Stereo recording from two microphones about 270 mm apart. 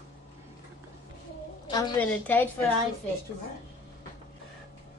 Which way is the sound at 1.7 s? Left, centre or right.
Centre.